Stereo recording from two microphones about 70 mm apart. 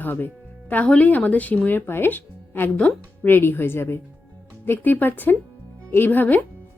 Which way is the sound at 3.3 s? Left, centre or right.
Left.